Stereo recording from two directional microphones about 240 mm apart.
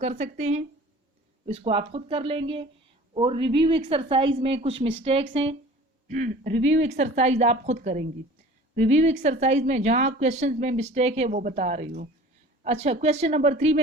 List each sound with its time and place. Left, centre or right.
0.0 s a woman's voice: right
6.5 s speech: right
6.7 s a woman's voice: right